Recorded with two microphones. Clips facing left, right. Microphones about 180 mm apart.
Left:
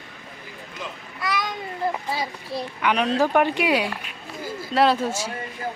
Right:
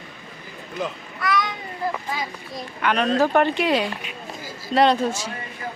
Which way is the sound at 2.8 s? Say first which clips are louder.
Right 2 dB; 10° left (ahead or behind).